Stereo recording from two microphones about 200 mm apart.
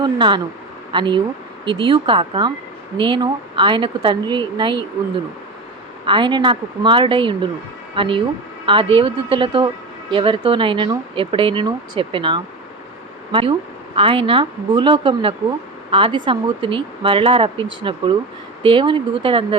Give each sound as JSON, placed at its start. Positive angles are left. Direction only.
{"t": 0.0, "sound": "speech", "side_deg": -25}
{"t": 6.1, "sound": "speech", "side_deg": -25}